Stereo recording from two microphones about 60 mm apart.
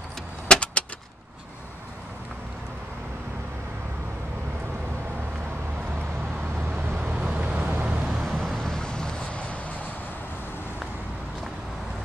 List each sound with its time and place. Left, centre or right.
0.5 s typewriter: centre
6.7 s vehicle: right
8.2 s vehicle: centre